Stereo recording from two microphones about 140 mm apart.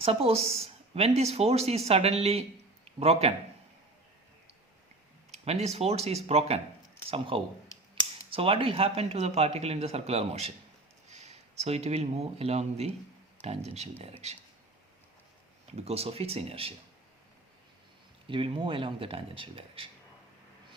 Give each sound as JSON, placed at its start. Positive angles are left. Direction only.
{"t": 0.0, "sound": "speech", "side_deg": -45}
{"t": 5.3, "sound": "speech", "side_deg": -50}
{"t": 15.8, "sound": "speech", "side_deg": -45}
{"t": 18.3, "sound": "speech", "side_deg": -40}